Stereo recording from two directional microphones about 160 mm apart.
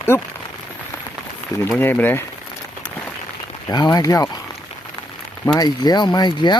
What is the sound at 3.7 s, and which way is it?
Speech, 25° left (ahead or behind).